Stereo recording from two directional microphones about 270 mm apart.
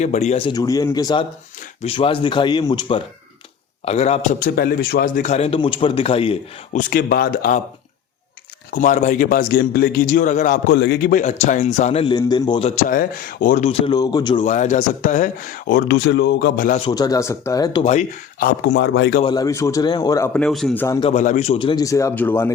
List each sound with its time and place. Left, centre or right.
0.0 s a man's voice: left
6.7 s a man's voice: left
8.7 s a man's voice: left
10.8 s a man's voice: left
11.1 s a man's voice: left
14.4 s a man's voice: left
16.9 s a man's voice: centre; by 19.2 s left
19.2 s speech: centre
21.1 s speech: left; by 22.5 s centre